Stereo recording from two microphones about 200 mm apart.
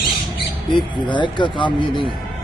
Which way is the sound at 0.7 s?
25° left (ahead or behind).